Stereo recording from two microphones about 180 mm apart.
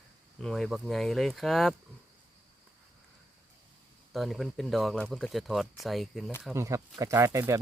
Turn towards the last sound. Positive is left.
turn(degrees=-15)  # may be behind; listen again after turning